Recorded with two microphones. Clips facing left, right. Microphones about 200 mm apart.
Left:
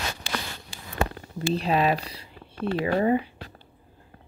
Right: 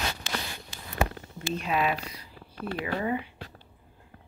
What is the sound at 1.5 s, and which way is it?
Speech, 35° left (ahead or behind).